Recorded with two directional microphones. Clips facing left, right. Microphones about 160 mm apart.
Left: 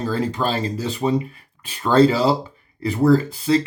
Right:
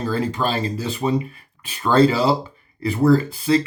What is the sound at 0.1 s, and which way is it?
Speech, 35° left (ahead or behind).